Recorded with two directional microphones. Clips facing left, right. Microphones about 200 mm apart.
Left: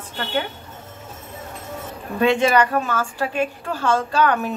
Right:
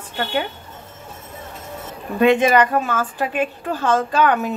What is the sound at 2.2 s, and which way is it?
A woman's voice, 20° right (ahead or behind).